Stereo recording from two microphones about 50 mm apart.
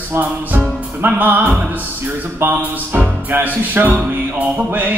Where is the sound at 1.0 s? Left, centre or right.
Right.